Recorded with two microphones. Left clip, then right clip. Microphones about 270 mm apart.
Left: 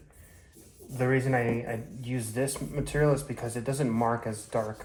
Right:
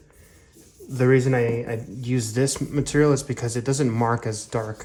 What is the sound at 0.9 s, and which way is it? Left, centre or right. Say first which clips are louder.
Speech: right 7 dB; right.